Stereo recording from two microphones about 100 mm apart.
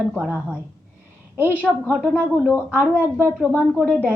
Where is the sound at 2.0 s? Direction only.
10° right (ahead or behind).